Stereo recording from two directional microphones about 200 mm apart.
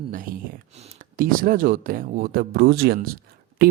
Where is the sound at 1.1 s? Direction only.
45° right (ahead or behind).